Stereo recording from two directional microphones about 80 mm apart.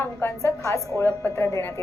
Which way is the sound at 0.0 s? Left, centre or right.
Left.